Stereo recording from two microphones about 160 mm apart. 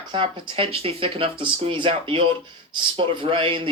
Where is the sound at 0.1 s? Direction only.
30° right (ahead or behind).